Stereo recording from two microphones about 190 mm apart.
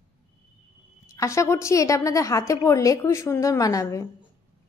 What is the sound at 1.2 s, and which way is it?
A woman's voice, 15° left (ahead or behind).